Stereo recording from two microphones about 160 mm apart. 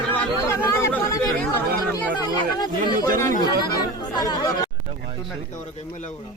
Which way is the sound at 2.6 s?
30° left (ahead or behind).